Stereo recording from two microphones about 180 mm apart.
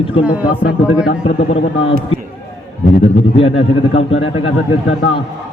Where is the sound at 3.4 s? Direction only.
30° left (ahead or behind).